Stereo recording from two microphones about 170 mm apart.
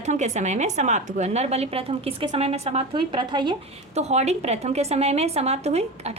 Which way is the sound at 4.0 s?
40° right (ahead or behind).